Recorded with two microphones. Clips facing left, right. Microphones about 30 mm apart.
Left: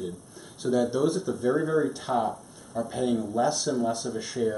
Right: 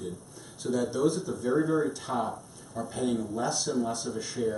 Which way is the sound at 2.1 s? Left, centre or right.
Centre.